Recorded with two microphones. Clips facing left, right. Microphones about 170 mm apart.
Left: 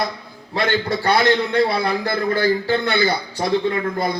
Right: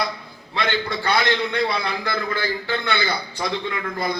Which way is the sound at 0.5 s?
45° left (ahead or behind).